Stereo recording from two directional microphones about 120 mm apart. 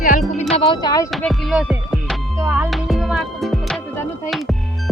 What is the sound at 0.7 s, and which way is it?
Speech, 35° left (ahead or behind).